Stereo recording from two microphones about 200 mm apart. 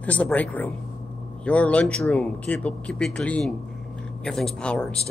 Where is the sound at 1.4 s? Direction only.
5° left (ahead or behind).